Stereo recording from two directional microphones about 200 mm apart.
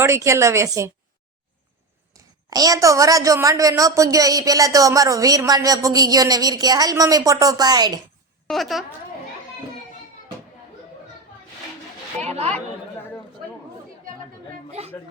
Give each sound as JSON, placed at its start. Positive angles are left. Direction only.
{"t": 0.0, "sound": "a woman's voice", "side_deg": -15}
{"t": 2.1, "sound": "a woman's voice", "side_deg": -20}
{"t": 8.4, "sound": "a woman's voice", "side_deg": 0}
{"t": 12.3, "sound": "speech", "side_deg": -30}
{"t": 14.7, "sound": "chatter", "side_deg": -30}